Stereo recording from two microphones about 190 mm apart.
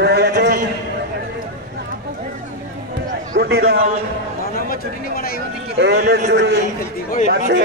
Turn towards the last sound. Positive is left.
turn(degrees=-60)  # may be behind; listen again after turning